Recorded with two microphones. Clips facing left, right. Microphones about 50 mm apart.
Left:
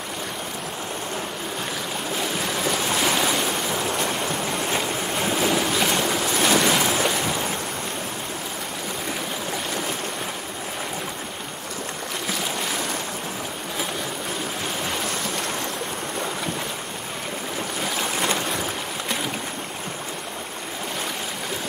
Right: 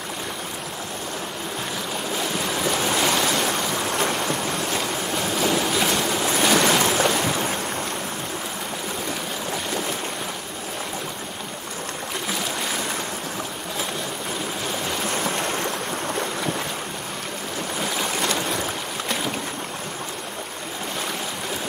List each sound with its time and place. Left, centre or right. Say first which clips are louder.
2.1 s waves: even; centre
4.6 s vehicle: left 1 dB; left
5.4 s waves: right 1 dB; centre
5.7 s boat: even; centre
6.1 s waves: right 3 dB; centre
17.7 s boat: right 1 dB; centre